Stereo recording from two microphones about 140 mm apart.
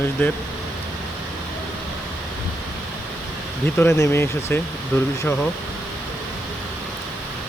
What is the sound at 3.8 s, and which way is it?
Speech, 20° left (ahead or behind).